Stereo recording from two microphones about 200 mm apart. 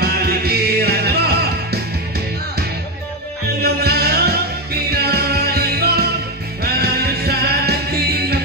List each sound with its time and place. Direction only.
0.0 s music: 50° right (ahead or behind)
3.6 s music: 50° right (ahead or behind)